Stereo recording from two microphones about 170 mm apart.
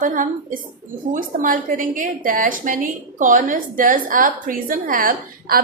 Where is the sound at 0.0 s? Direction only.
50° right (ahead or behind).